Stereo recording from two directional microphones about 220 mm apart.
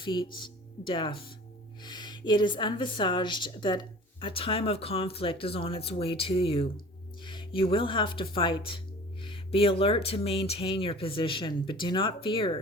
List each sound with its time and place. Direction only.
0.0 s speech: 20° left (ahead or behind)